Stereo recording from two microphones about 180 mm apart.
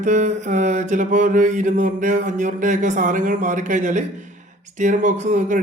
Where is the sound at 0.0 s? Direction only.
45° right (ahead or behind).